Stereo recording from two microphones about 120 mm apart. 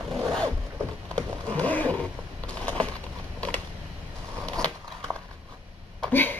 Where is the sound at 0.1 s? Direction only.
Centre (ahead or behind).